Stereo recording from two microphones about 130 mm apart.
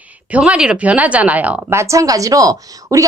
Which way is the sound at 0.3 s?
10° right (ahead or behind).